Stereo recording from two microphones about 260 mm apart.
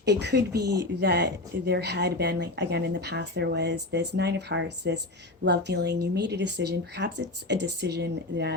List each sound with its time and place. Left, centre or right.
0.0 s speech: right